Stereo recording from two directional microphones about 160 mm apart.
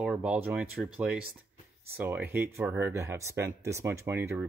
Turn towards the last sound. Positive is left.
turn(degrees=-15)  # may be behind; listen again after turning